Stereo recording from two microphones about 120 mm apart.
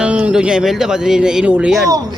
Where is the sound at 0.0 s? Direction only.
10° right (ahead or behind).